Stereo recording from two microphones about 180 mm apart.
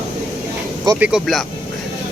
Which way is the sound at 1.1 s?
Centre (ahead or behind).